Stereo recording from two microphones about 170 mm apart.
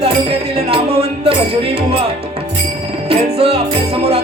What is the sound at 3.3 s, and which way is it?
Speech, 35° right (ahead or behind).